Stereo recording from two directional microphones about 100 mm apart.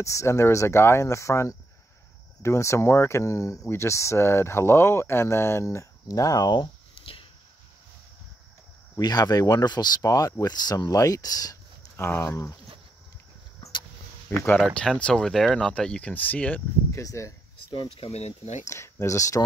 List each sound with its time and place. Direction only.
0.0 s speech: 30° left (ahead or behind); by 7.2 s 65° left (ahead or behind)
8.9 s speech: 40° left (ahead or behind)
12.0 s speech: 25° left (ahead or behind)
14.3 s speech: 25° left (ahead or behind)
14.7 s speech: 10° left (ahead or behind)
16.9 s speech: 30° left (ahead or behind)
17.9 s speech: 85° left
18.7 s speech: 30° left (ahead or behind)